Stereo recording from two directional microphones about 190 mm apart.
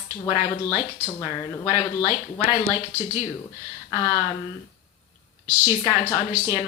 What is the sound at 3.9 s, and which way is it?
Speech, 25° left (ahead or behind).